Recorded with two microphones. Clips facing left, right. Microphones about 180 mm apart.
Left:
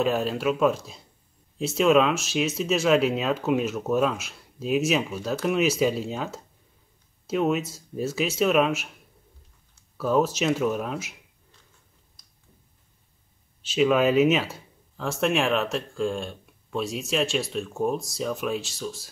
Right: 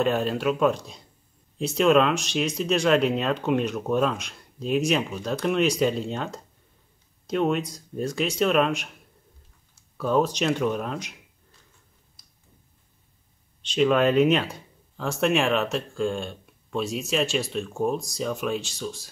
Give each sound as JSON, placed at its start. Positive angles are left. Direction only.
{"t": 0.0, "sound": "speech", "side_deg": 0}
{"t": 9.9, "sound": "speech", "side_deg": 5}
{"t": 12.2, "sound": "a sound", "side_deg": -5}
{"t": 13.6, "sound": "speech", "side_deg": 5}